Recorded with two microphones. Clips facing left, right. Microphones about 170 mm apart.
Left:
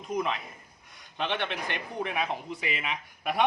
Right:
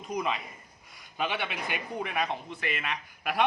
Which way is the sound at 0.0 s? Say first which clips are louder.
Left 1 dB; centre (ahead or behind).